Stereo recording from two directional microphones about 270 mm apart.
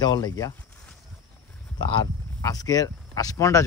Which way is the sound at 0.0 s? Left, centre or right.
Centre.